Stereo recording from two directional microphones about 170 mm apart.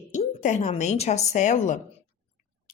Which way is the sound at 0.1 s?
45° left (ahead or behind).